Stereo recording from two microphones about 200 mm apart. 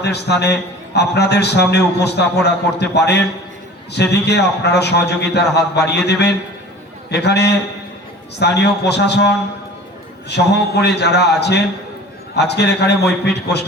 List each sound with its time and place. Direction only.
0.0 s a man's voice: 55° left (ahead or behind)